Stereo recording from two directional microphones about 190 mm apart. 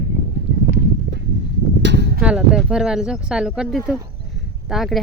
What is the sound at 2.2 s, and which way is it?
Speech, 5° right (ahead or behind).